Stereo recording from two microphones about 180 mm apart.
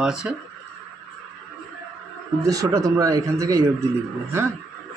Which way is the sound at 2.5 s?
20° right (ahead or behind).